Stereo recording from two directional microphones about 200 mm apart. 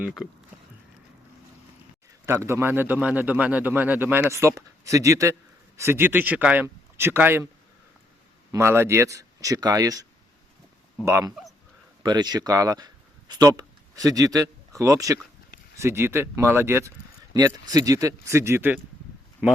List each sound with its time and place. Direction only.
2.2 s a man's voice: 10° right (ahead or behind)
8.5 s a man's voice: 10° right (ahead or behind)